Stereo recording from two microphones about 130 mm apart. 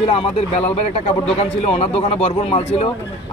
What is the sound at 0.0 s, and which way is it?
A man's voice, 45° left (ahead or behind).